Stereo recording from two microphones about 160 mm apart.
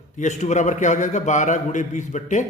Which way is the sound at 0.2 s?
45° left (ahead or behind).